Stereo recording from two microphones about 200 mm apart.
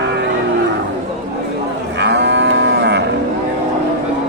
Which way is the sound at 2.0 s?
60° right (ahead or behind).